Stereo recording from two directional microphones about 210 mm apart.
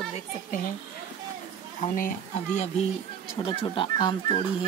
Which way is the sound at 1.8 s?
35° left (ahead or behind).